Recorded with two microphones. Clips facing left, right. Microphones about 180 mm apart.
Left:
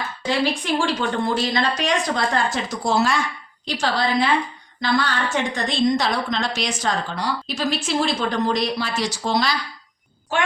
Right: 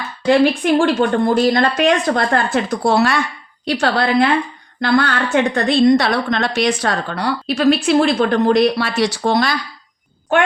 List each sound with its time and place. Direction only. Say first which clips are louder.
0.3 s a woman's voice: right 9 dB; 55° right (ahead or behind)